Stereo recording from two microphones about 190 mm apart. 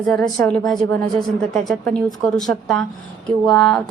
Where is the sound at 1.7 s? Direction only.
5° left (ahead or behind).